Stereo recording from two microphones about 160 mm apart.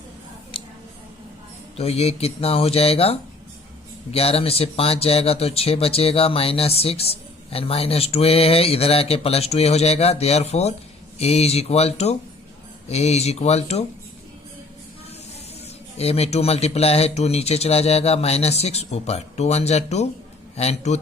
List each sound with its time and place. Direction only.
0.5 s a sound: 35° left (ahead or behind)
1.7 s speech: 40° left (ahead or behind)
16.0 s a man's voice: 40° left (ahead or behind)